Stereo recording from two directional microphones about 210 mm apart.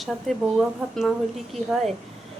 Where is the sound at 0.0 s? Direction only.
Centre (ahead or behind).